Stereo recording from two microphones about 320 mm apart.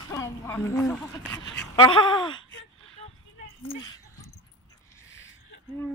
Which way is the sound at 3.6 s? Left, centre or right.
Centre.